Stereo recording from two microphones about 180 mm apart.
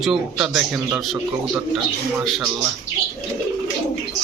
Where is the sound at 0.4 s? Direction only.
5° right (ahead or behind).